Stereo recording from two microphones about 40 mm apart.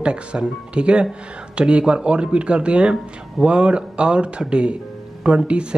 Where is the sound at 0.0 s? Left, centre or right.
Right.